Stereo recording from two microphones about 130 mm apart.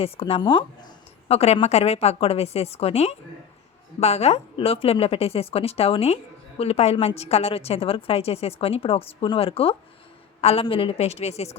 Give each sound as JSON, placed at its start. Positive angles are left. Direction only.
{"t": 0.0, "sound": "a woman's voice", "side_deg": 45}
{"t": 1.3, "sound": "a woman's voice", "side_deg": 55}